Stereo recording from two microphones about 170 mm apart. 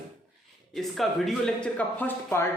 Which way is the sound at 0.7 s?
Centre (ahead or behind).